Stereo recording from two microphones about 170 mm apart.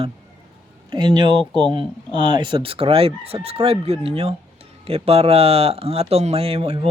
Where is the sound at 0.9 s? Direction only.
25° right (ahead or behind).